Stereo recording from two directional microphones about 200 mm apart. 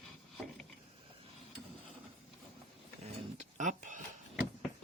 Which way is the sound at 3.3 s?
40° right (ahead or behind).